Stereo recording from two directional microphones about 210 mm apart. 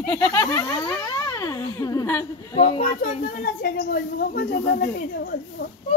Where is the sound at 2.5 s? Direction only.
30° left (ahead or behind); by 4.8 s 45° left (ahead or behind).